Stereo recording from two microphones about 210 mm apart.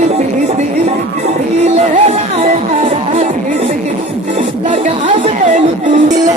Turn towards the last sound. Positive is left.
turn(degrees=-35)  # may be behind; listen again after turning